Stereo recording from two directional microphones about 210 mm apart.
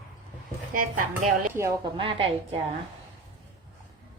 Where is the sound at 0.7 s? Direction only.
40° right (ahead or behind).